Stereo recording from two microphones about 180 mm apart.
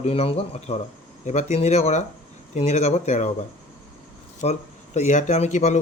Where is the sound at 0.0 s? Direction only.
35° left (ahead or behind).